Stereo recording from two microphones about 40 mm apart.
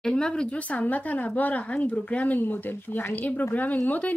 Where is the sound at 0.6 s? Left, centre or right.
Left.